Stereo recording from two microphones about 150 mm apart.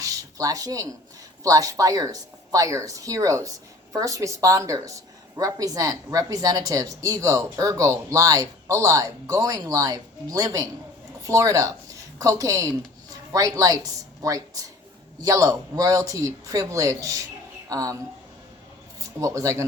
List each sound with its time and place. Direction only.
0.0 s a sound: 20° right (ahead or behind)
1.5 s a woman's voice: 20° right (ahead or behind)
19.2 s a woman's voice: 20° right (ahead or behind)